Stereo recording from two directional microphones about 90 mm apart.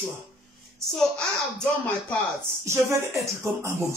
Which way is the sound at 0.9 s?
5° left (ahead or behind).